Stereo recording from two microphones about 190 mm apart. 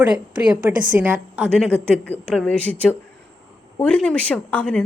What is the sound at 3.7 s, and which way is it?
A woman's voice, 5° left (ahead or behind).